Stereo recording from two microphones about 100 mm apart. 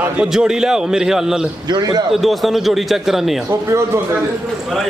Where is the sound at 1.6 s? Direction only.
45° right (ahead or behind).